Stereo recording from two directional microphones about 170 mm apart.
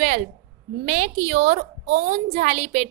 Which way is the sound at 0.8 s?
45° right (ahead or behind).